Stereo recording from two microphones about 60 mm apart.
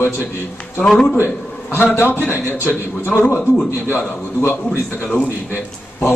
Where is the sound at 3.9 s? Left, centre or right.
Left.